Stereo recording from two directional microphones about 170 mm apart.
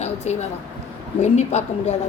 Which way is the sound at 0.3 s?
40° left (ahead or behind).